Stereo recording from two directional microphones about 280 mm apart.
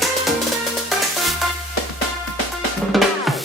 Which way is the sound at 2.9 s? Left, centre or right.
Centre.